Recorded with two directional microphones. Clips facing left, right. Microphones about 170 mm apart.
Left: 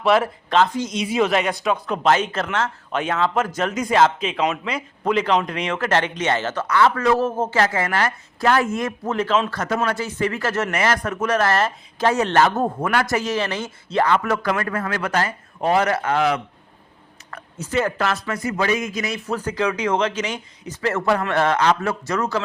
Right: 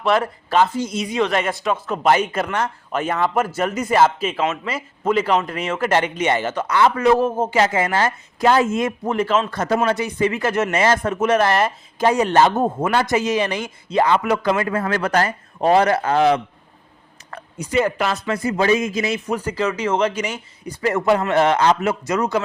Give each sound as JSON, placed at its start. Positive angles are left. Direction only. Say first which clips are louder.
{"t": 0.0, "sound": "speech", "louder": "left 1 dB", "side_deg": 0}
{"t": 0.5, "sound": "speech", "louder": "right 1 dB", "side_deg": -10}
{"t": 1.0, "sound": "speech", "louder": "left 2 dB", "side_deg": 5}
{"t": 9.0, "sound": "speech", "louder": "even", "side_deg": -10}
{"t": 9.5, "sound": "speech", "louder": "right 3 dB", "side_deg": -30}
{"t": 9.9, "sound": "a man's voice", "louder": "right 3 dB", "side_deg": -15}
{"t": 17.6, "sound": "speech", "louder": "right 2 dB", "side_deg": -10}
{"t": 18.3, "sound": "speech", "louder": "right 4 dB", "side_deg": -30}
{"t": 19.3, "sound": "speech", "louder": "right 1 dB", "side_deg": -10}